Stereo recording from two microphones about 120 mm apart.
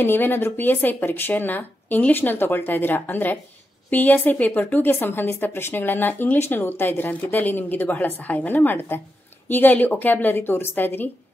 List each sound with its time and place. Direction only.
0.0 s speech: 15° left (ahead or behind)